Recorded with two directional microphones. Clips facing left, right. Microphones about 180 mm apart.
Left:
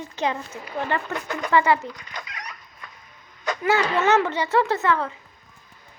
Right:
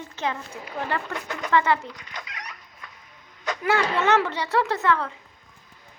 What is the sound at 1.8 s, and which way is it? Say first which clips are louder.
Chicken: left 3 dB; 45° left (ahead or behind).